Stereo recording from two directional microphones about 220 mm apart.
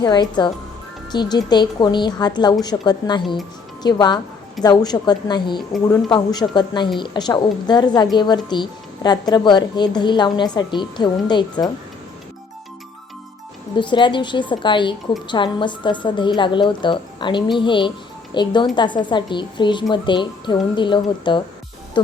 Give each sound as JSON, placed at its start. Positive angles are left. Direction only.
{"t": 0.0, "sound": "a woman's voice", "side_deg": 20}
{"t": 13.7, "sound": "a woman's voice", "side_deg": 20}